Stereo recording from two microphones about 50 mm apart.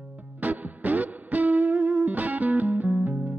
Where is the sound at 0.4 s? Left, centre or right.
Right.